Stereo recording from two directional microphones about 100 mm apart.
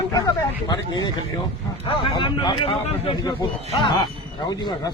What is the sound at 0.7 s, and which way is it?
Speech, 45° left (ahead or behind).